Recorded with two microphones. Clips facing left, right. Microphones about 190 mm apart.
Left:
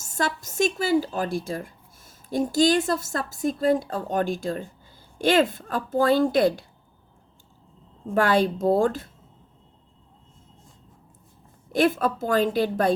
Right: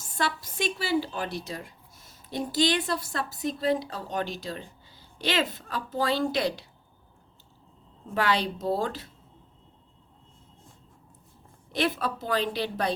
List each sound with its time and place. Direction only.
0.0 s speech: 45° left (ahead or behind)
8.1 s speech: 50° left (ahead or behind)
11.7 s speech: 50° left (ahead or behind)